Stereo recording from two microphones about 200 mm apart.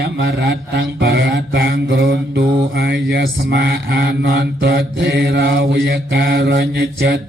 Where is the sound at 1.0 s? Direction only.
60° right (ahead or behind).